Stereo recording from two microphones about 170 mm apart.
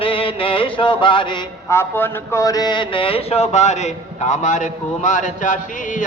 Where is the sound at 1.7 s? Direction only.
15° left (ahead or behind).